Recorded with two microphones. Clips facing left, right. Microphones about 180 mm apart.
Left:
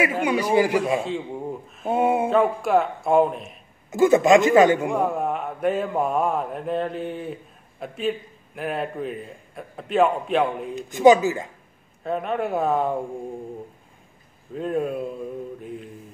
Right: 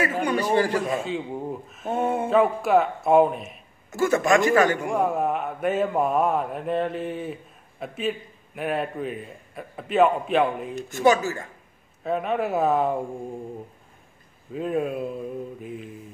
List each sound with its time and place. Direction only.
0.0 s a man's voice: 10° left (ahead or behind)
0.9 s a man's voice: centre (ahead or behind)
1.9 s a man's voice: 10° left (ahead or behind)
2.2 s a man's voice: centre (ahead or behind)
3.9 s speech: 20° left (ahead or behind)
4.8 s a man's voice: centre (ahead or behind)
10.9 s a man's voice: 15° left (ahead or behind)
12.0 s a man's voice: centre (ahead or behind)
14.5 s a man's voice: centre (ahead or behind)